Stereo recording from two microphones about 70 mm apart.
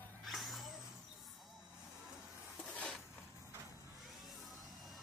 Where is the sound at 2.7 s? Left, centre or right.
Centre.